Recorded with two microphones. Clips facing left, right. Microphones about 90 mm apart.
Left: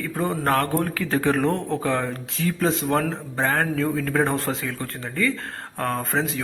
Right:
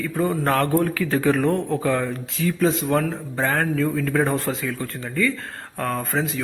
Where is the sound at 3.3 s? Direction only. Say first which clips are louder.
Right 1 dB; 20° left (ahead or behind).